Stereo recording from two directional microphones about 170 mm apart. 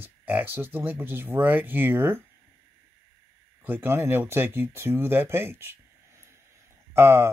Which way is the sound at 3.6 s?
15° right (ahead or behind).